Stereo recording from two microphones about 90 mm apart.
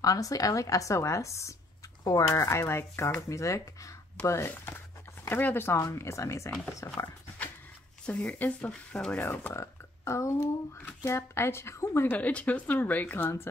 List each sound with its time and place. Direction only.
0.0 s speech: 40° left (ahead or behind)
4.5 s a woman's voice: 25° left (ahead or behind)
8.1 s speech: 15° left (ahead or behind)
9.5 s a woman's voice: 35° left (ahead or behind)
12.2 s speech: 15° left (ahead or behind)